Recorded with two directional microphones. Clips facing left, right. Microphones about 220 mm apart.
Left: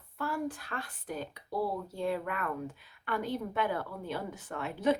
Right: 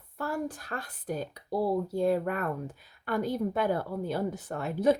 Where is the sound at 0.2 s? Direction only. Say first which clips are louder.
Right 2 dB; 40° right (ahead or behind).